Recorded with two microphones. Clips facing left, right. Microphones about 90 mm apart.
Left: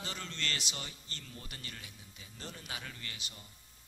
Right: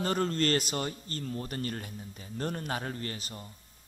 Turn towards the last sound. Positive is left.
turn(degrees=-40)  # may be behind; listen again after turning